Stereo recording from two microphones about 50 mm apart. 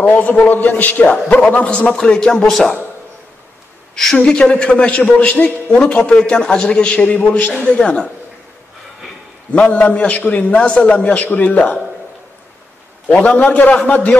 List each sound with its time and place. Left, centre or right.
0.0 s a man's voice: left; by 2.8 s centre
3.9 s a woman's voice: centre; by 7.5 s left
7.8 s a man's voice: centre
9.5 s a man's voice: left
13.1 s a man's voice: left